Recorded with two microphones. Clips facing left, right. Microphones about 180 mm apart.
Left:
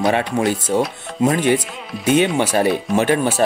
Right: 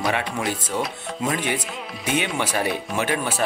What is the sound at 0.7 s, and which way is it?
Speech, 40° left (ahead or behind).